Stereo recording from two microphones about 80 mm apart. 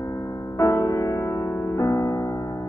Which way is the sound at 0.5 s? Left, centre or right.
Left.